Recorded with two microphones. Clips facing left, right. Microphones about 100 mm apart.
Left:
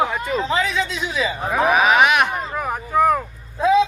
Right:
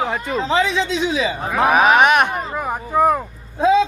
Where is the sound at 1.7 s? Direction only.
45° right (ahead or behind).